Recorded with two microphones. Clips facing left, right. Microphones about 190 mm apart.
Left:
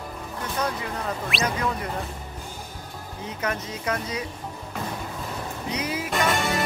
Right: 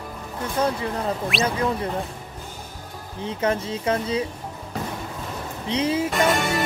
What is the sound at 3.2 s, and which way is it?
Speech, 30° right (ahead or behind).